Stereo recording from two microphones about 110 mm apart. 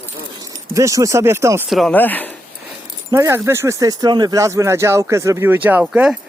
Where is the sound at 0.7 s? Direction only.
30° right (ahead or behind).